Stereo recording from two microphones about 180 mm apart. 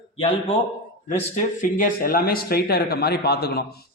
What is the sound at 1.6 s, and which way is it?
Speech, 45° left (ahead or behind).